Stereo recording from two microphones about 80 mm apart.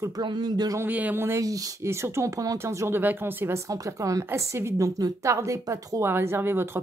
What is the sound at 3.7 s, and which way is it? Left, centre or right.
A woman's voice, right.